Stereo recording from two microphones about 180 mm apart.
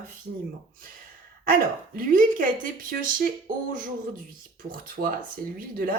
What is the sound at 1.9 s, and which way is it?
Speech, 50° right (ahead or behind).